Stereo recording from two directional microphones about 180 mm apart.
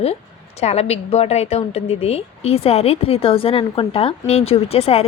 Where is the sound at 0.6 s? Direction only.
35° left (ahead or behind).